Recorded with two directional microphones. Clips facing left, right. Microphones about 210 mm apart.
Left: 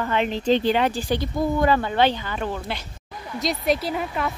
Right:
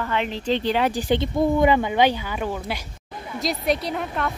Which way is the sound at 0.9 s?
20° right (ahead or behind).